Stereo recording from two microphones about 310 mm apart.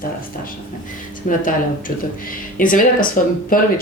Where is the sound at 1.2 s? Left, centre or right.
Left.